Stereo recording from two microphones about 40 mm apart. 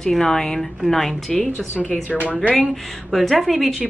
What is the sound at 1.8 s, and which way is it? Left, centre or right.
Speech, left.